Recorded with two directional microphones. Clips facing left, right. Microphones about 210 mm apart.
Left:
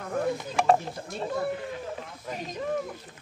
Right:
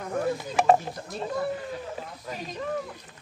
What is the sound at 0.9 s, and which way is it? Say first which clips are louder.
Speech: even; 25° left (ahead or behind).